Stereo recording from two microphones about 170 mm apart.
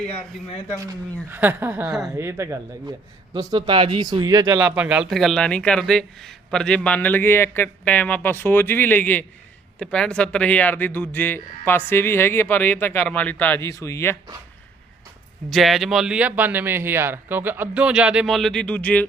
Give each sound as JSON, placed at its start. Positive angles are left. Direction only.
{"t": 1.3, "sound": "a woman's voice", "side_deg": -10}
{"t": 2.1, "sound": "a woman's voice", "side_deg": -15}
{"t": 15.4, "sound": "speech", "side_deg": 0}